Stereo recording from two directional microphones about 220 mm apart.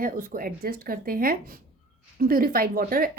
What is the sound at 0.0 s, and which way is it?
A woman's voice, 40° right (ahead or behind).